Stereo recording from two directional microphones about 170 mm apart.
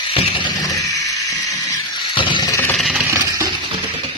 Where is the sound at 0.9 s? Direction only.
20° left (ahead or behind).